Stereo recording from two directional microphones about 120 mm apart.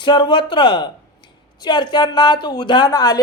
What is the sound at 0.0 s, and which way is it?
Speech, 40° left (ahead or behind).